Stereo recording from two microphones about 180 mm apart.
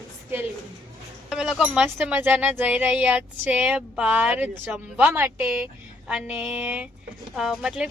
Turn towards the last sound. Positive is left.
turn(degrees=-5)  # may be behind; listen again after turning